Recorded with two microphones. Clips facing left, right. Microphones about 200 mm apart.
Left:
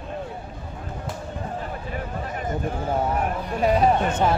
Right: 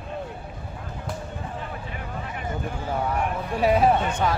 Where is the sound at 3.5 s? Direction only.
5° right (ahead or behind).